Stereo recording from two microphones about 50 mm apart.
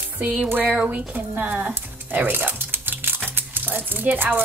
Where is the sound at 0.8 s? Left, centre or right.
Right.